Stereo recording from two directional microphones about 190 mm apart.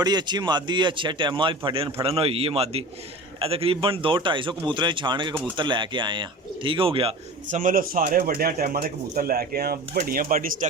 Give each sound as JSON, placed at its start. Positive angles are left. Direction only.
{"t": 0.0, "sound": "speech", "side_deg": -20}
{"t": 7.5, "sound": "speech", "side_deg": -45}